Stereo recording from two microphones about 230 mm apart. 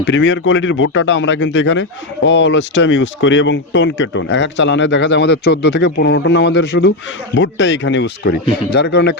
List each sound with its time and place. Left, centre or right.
0.0 s speech: left